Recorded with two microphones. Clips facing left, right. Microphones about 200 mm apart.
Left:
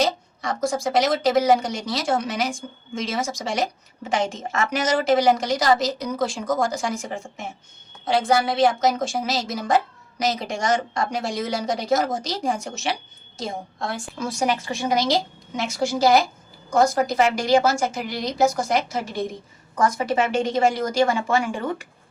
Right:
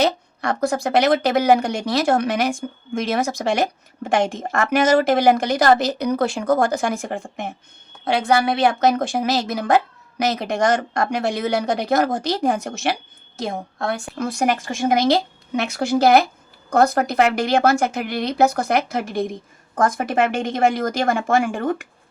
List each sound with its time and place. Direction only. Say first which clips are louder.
0.0 s a woman's voice: right 3 dB; 60° right (ahead or behind)